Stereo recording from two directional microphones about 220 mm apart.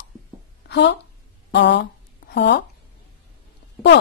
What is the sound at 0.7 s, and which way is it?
A woman's voice, 50° left (ahead or behind).